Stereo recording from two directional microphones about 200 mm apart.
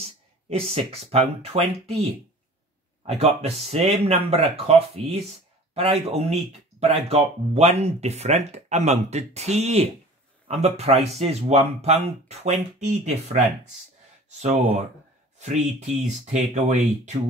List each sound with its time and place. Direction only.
0.0 s speech: 30° right (ahead or behind)
3.1 s speech: 30° right (ahead or behind)
15.3 s a sound: 35° right (ahead or behind)
16.3 s speech: 35° right (ahead or behind)